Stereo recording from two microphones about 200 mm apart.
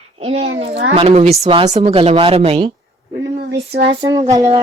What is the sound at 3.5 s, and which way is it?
Female singing, 60° right (ahead or behind).